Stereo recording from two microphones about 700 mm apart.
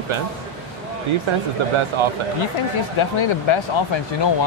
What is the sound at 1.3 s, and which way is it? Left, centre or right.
Speech, right.